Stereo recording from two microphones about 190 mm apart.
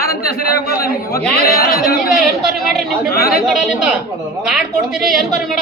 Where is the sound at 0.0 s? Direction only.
50° left (ahead or behind).